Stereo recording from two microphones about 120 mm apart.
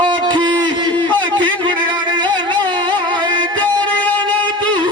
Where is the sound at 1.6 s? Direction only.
40° right (ahead or behind).